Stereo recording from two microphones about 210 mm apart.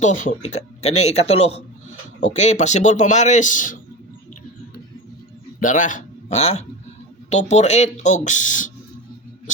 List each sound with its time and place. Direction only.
0.0 s speech: 35° left (ahead or behind)
5.5 s speech: 40° left (ahead or behind)